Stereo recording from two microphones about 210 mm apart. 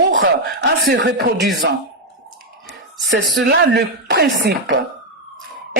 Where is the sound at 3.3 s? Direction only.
55° right (ahead or behind).